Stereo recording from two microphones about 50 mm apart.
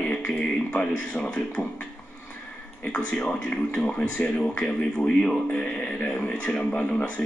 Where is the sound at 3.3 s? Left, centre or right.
Left.